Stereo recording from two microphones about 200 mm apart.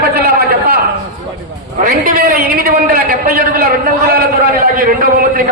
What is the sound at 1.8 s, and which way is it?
A man's voice, 45° right (ahead or behind).